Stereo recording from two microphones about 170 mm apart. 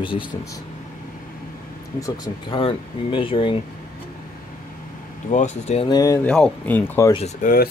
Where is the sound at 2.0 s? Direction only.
25° left (ahead or behind).